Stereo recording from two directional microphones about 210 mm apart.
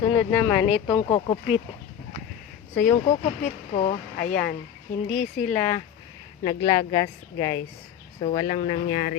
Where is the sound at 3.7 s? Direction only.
35° left (ahead or behind).